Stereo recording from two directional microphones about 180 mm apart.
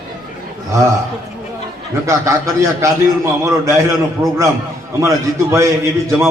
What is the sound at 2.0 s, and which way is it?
A man's voice, 15° right (ahead or behind).